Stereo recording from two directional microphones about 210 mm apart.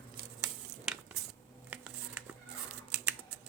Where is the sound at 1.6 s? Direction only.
5° right (ahead or behind).